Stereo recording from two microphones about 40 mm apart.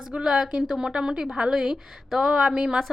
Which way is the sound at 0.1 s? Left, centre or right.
Centre.